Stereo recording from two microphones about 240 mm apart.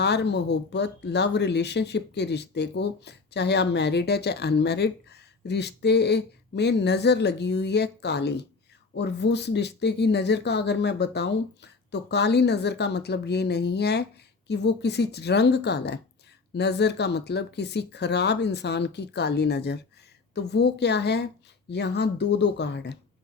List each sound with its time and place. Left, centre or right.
0.0 s speech: left